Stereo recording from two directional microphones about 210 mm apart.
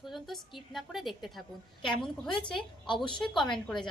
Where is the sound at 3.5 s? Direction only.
Centre (ahead or behind).